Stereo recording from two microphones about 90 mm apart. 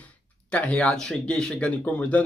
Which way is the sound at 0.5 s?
15° left (ahead or behind).